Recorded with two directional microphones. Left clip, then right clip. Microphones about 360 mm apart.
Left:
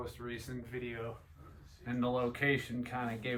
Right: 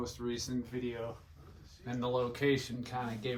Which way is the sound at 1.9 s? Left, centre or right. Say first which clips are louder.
Right 1 dB; centre.